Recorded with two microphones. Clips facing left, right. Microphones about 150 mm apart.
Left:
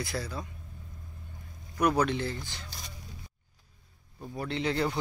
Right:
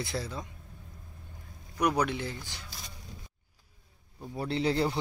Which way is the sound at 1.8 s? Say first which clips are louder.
Left 2 dB; 15° right (ahead or behind).